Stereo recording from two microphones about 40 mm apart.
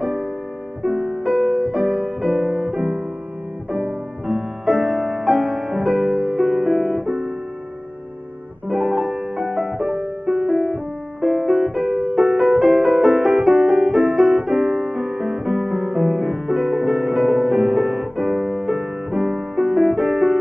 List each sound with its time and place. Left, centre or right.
0.0 s music: centre
1.8 s music: centre
2.0 s music: centre
4.3 s music: centre
8.6 s music: centre
9.7 s music: centre
10.2 s music: centre